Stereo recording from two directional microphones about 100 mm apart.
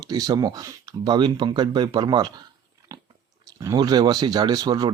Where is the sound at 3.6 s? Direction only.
40° right (ahead or behind).